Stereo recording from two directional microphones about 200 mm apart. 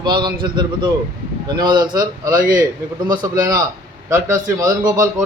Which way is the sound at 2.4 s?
45° right (ahead or behind).